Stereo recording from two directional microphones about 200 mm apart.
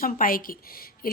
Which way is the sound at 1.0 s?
45° left (ahead or behind).